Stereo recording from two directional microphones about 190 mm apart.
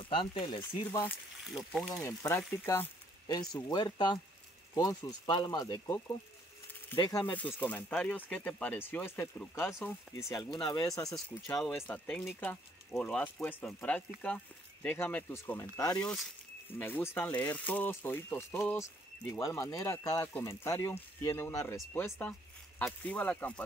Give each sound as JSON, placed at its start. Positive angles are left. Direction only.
{"t": 0.1, "sound": "speech", "side_deg": 25}
{"t": 1.4, "sound": "speech", "side_deg": 0}
{"t": 1.9, "sound": "speech", "side_deg": 15}
{"t": 11.1, "sound": "speech", "side_deg": 5}